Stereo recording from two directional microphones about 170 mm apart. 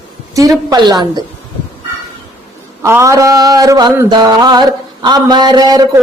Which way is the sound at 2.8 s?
15° right (ahead or behind).